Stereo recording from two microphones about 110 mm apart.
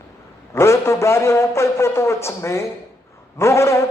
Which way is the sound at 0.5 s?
25° left (ahead or behind).